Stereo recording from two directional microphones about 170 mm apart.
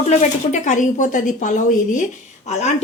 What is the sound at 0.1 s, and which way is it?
Speech, 45° left (ahead or behind).